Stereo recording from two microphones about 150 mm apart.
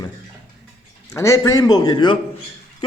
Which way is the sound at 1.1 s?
20° left (ahead or behind).